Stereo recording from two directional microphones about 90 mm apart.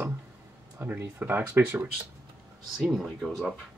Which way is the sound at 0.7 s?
20° right (ahead or behind).